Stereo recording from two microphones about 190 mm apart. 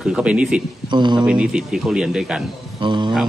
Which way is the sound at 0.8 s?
25° right (ahead or behind).